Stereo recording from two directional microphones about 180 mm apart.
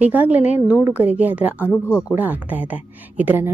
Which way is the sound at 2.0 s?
10° right (ahead or behind).